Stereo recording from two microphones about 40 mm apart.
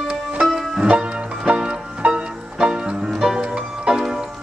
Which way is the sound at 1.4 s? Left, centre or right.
Right.